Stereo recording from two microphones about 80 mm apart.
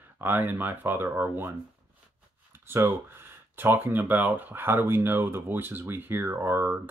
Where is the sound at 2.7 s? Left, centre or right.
Right.